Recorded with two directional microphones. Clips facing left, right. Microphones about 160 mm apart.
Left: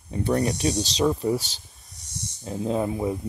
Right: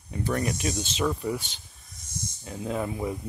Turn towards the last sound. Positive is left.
turn(degrees=25)  # may be behind; listen again after turning